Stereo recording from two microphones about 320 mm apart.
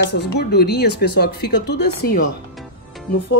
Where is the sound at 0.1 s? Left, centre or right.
Left.